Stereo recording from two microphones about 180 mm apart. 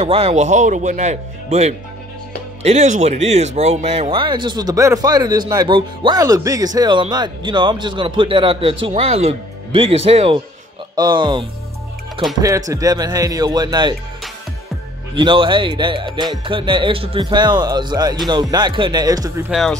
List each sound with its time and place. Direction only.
0.0 s speech: 35° right (ahead or behind)
15.1 s speech: 25° right (ahead or behind)
19.5 s speech: centre (ahead or behind)